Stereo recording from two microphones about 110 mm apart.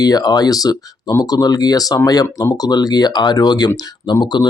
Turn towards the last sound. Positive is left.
turn(degrees=40)  # may be behind; listen again after turning